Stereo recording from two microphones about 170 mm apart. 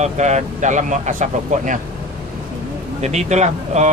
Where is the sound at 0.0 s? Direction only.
45° right (ahead or behind).